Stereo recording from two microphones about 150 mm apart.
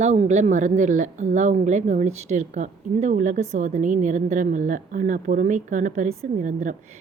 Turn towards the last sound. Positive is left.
turn(degrees=-55)  # may be behind; listen again after turning